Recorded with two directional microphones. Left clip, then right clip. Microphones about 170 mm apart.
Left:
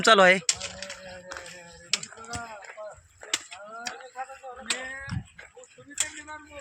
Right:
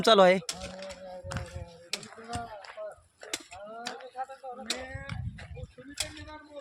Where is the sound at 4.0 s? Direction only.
60° right (ahead or behind); by 5.0 s 90° right.